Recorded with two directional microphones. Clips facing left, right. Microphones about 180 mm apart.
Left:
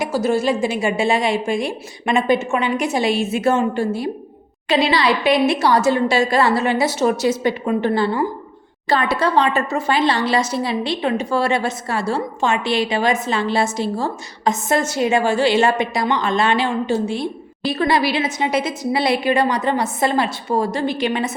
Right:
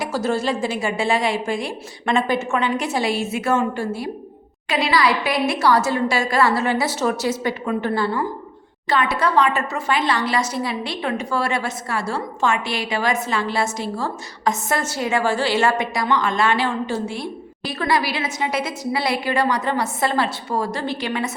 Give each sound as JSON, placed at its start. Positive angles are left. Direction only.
{"t": 0.0, "sound": "speech", "side_deg": 10}